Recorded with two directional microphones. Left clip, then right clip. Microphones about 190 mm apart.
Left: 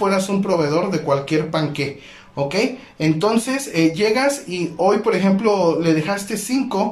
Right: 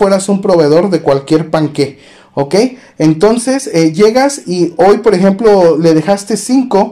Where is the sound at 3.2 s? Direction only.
40° right (ahead or behind).